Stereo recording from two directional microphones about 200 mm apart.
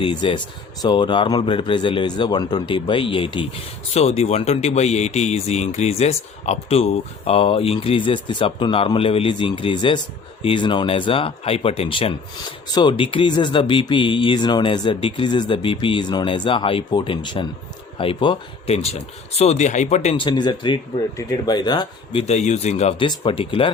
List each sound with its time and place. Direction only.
0.0 s speech: 25° left (ahead or behind)